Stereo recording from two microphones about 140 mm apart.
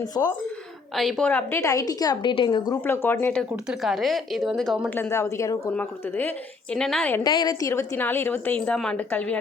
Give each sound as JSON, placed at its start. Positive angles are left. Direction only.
{"t": 0.0, "sound": "speech", "side_deg": 25}
{"t": 0.9, "sound": "a woman's voice", "side_deg": 0}
{"t": 2.8, "sound": "a woman's voice", "side_deg": 15}
{"t": 3.5, "sound": "speech", "side_deg": -5}
{"t": 4.9, "sound": "a woman's voice", "side_deg": 15}
{"t": 7.3, "sound": "a woman's voice", "side_deg": 30}